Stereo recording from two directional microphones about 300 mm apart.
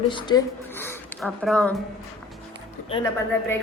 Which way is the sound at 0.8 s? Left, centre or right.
Centre.